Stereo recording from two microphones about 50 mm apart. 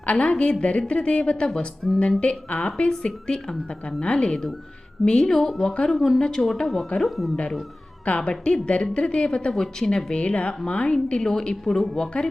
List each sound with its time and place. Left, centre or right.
0.0 s a woman's voice: left
1.5 s a woman's voice: centre
2.2 s a woman's voice: left; by 7.3 s centre
8.0 s a woman's voice: left
10.9 s a woman's voice: centre